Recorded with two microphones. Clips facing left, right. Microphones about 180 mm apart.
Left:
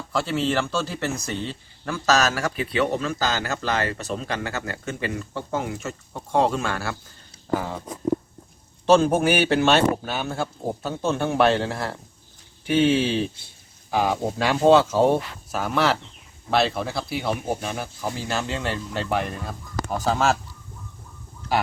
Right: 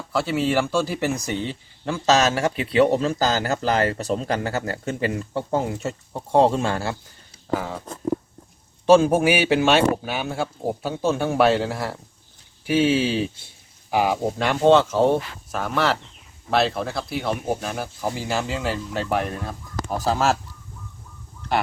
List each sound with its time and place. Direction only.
0.1 s speech: 5° right (ahead or behind); by 6.9 s 30° right (ahead or behind)
8.9 s speech: 10° right (ahead or behind)